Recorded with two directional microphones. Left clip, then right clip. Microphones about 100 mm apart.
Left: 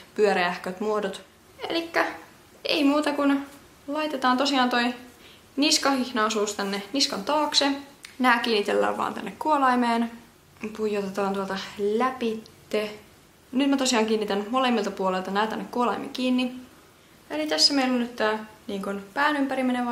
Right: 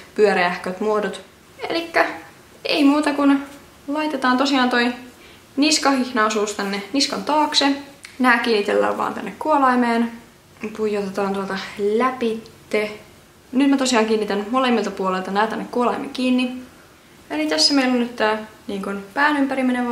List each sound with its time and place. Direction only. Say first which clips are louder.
0.1 s a woman's voice: right 5 dB; 15° left (ahead or behind)